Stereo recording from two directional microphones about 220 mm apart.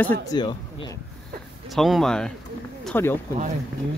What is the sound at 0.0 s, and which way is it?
Speech, 10° left (ahead or behind).